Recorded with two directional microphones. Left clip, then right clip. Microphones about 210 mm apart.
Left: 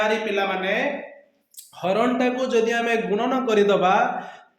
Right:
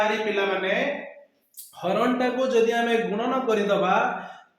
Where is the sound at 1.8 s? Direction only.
50° left (ahead or behind).